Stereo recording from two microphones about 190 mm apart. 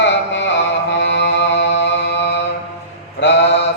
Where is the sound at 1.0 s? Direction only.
70° left (ahead or behind).